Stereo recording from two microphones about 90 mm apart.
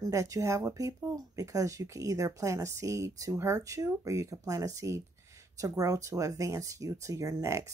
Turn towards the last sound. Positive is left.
turn(degrees=-35)  # may be behind; listen again after turning